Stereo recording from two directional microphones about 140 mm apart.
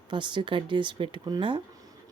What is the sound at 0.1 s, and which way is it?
Speech, 35° right (ahead or behind).